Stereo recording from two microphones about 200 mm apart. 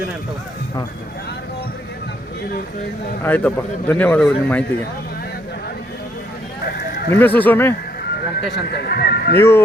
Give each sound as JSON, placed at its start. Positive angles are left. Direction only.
{"t": 3.2, "sound": "speech", "side_deg": 10}
{"t": 6.7, "sound": "a sound", "side_deg": 50}
{"t": 7.1, "sound": "speech", "side_deg": 10}
{"t": 8.0, "sound": "vehicle", "side_deg": 55}
{"t": 8.5, "sound": "speech", "side_deg": 55}